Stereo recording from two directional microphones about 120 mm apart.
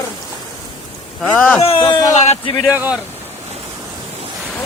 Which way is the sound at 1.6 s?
50° left (ahead or behind).